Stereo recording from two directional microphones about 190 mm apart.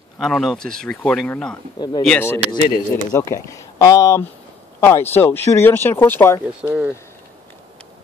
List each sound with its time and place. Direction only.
0.2 s speech: centre (ahead or behind)
1.8 s speech: 25° left (ahead or behind)
2.0 s speech: 10° left (ahead or behind)
6.6 s speech: 10° right (ahead or behind)